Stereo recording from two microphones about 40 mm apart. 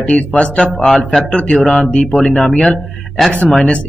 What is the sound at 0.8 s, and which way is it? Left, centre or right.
Speech, centre.